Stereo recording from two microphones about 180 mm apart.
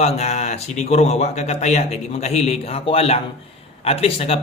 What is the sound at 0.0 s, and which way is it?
A man's voice, 35° left (ahead or behind).